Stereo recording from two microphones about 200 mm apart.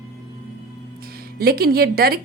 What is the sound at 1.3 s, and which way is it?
Speech, 50° right (ahead or behind).